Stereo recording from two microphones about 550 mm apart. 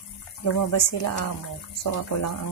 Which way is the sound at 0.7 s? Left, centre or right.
Left.